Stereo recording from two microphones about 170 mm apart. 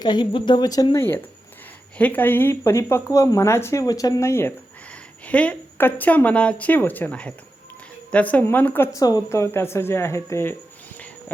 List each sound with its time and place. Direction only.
0.0 s a woman's voice: 25° left (ahead or behind)